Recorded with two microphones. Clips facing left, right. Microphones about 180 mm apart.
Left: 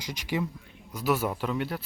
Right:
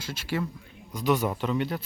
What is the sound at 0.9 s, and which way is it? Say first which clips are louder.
Speech: right 2 dB; 5° left (ahead or behind).